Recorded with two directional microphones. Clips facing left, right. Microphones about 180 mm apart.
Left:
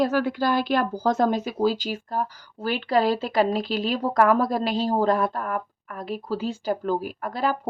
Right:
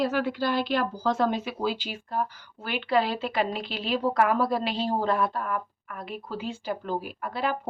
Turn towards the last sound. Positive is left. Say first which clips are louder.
# left 3 dB
turn(degrees=40)  # may be behind; listen again after turning